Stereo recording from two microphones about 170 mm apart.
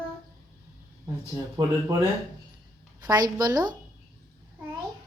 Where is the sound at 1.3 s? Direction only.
20° right (ahead or behind).